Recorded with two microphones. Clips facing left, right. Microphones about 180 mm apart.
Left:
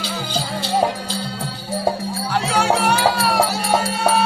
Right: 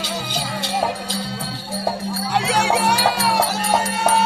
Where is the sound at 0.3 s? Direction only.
30° left (ahead or behind).